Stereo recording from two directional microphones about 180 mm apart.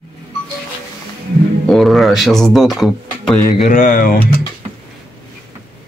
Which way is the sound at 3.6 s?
50° left (ahead or behind).